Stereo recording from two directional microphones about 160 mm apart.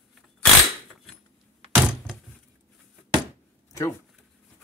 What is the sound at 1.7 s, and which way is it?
Thunk, 5° right (ahead or behind).